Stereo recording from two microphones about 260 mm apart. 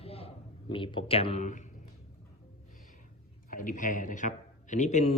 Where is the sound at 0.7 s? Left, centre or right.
Centre.